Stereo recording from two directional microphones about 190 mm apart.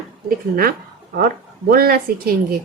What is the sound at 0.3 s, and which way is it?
Speech, 50° right (ahead or behind).